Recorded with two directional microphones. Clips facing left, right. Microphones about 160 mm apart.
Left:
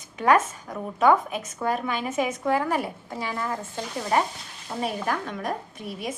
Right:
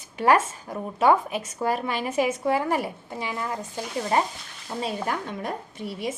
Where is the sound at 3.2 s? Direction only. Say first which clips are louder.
Left 1 dB; 20° right (ahead or behind).